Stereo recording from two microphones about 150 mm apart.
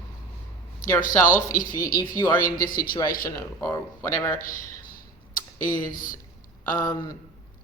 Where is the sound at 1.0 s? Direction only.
60° left (ahead or behind).